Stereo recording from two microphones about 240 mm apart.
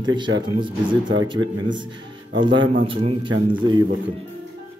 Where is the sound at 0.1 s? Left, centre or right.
Centre.